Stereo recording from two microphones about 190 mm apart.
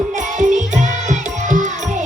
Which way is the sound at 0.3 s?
40° right (ahead or behind).